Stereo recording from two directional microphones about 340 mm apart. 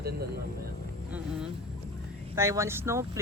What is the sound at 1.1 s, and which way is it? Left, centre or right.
Speech, centre.